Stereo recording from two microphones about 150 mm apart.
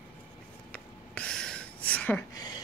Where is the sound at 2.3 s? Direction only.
25° left (ahead or behind).